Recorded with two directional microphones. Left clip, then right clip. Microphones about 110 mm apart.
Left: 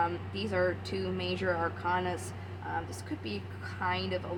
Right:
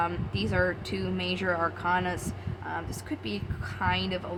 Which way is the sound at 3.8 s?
45° right (ahead or behind).